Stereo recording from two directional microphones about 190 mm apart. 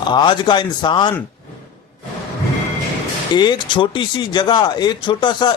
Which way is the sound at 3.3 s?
25° left (ahead or behind).